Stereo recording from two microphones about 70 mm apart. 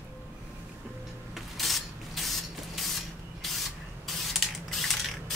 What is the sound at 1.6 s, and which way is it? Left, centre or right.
Printer, centre.